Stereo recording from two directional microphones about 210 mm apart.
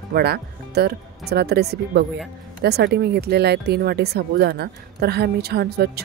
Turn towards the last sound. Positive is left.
turn(degrees=-50)  # may be behind; listen again after turning